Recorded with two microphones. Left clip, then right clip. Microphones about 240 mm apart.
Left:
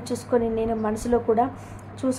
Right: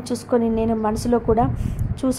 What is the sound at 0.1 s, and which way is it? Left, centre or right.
A woman's voice, right.